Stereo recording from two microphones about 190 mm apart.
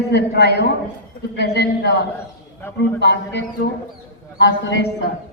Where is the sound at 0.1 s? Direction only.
60° left (ahead or behind).